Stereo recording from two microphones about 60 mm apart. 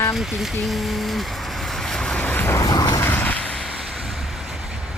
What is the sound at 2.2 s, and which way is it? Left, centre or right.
Vehicle, left.